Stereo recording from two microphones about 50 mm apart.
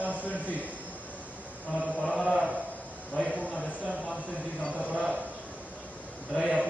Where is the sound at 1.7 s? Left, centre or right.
Centre.